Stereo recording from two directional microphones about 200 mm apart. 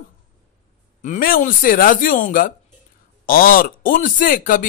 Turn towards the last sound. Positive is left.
turn(degrees=45)  # may be behind; listen again after turning